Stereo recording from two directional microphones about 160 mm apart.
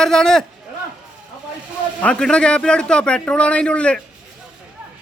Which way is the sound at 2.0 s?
5° left (ahead or behind).